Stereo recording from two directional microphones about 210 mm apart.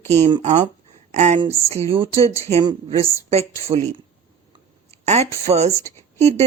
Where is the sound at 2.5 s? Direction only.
30° right (ahead or behind).